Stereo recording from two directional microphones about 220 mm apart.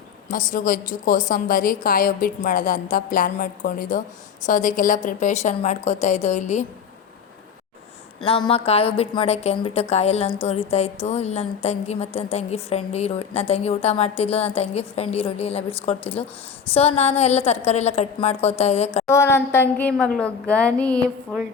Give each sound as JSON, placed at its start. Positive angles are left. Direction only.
{"t": 0.3, "sound": "a woman's voice", "side_deg": 35}
{"t": 8.4, "sound": "a woman's voice", "side_deg": 25}
{"t": 19.0, "sound": "a woman's voice", "side_deg": 10}